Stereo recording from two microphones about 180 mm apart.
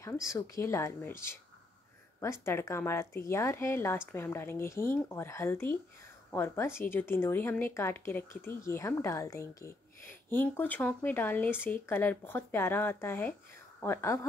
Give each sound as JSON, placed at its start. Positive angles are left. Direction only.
{"t": 0.0, "sound": "speech", "side_deg": 15}